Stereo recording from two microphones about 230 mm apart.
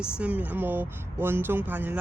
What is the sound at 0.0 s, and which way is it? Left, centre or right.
Speech, centre.